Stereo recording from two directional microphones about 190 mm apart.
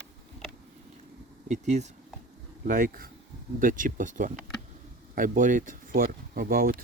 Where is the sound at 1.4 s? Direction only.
40° right (ahead or behind).